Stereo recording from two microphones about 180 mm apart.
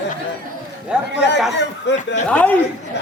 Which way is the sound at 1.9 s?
80° left.